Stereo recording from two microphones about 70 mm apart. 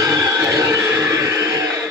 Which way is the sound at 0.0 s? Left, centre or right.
Right.